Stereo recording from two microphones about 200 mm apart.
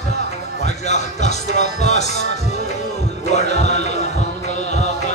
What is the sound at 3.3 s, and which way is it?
Music, 35° left (ahead or behind).